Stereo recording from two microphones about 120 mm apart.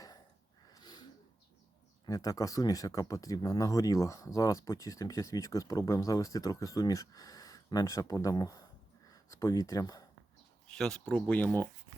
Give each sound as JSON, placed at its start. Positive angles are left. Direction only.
{"t": 0.7, "sound": "a sound", "side_deg": 35}
{"t": 2.0, "sound": "speech", "side_deg": 30}
{"t": 10.8, "sound": "speech", "side_deg": 5}